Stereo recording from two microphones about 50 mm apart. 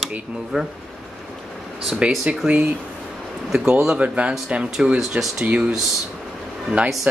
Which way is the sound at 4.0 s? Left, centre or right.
Right.